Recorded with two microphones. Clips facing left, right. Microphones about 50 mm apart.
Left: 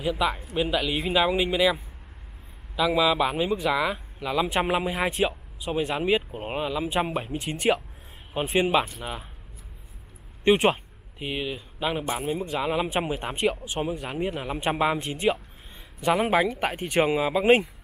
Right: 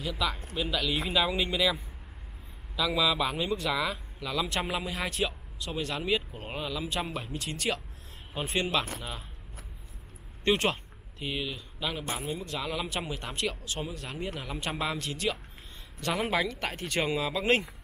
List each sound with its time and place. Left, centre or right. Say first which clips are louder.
0.0 s speech: left 6 dB; left
10.4 s speech: left 7 dB; centre